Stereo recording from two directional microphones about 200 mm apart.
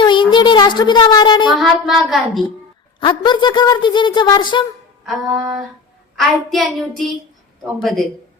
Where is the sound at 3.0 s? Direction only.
25° left (ahead or behind).